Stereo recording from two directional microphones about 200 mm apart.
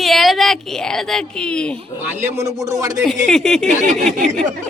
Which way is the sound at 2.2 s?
15° right (ahead or behind).